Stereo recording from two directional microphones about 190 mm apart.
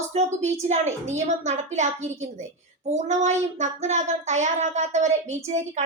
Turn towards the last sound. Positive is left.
turn(degrees=-35)  # may be behind; listen again after turning